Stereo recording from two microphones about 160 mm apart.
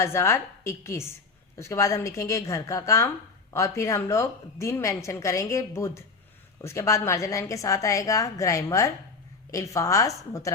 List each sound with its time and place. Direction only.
0.0 s a woman's voice: 15° left (ahead or behind)